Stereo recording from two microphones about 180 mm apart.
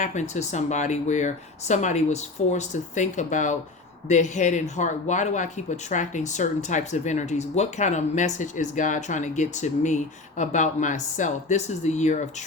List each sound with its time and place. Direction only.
0.0 s speech: 40° left (ahead or behind)